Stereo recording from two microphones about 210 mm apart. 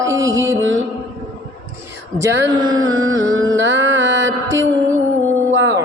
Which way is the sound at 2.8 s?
70° right (ahead or behind).